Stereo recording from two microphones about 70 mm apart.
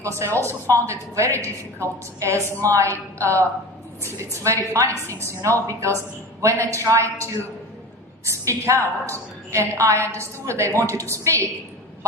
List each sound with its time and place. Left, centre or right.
0.0 s a woman's voice: right
8.4 s a woman's voice: right